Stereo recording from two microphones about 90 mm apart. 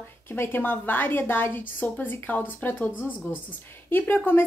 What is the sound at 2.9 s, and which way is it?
Speech, 15° right (ahead or behind).